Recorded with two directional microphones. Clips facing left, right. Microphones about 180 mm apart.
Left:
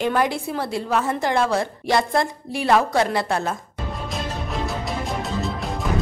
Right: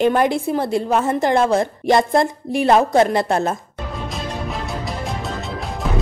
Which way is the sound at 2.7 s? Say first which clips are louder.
Right 3 dB; 25° right (ahead or behind).